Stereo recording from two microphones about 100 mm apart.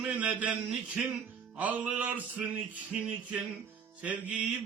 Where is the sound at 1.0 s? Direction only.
10° right (ahead or behind).